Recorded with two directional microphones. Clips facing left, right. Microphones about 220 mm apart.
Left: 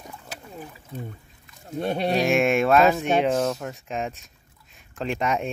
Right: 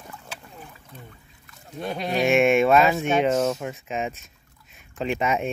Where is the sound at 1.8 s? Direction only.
35° left (ahead or behind).